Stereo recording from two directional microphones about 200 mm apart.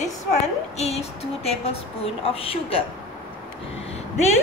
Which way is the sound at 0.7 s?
30° left (ahead or behind).